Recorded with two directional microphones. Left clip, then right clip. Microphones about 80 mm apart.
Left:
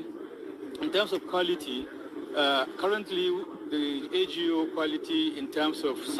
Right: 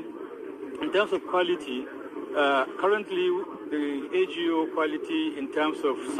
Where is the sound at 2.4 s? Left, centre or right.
Centre.